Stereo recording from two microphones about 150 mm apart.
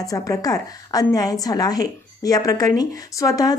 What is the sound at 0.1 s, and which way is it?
A woman's voice, 25° left (ahead or behind).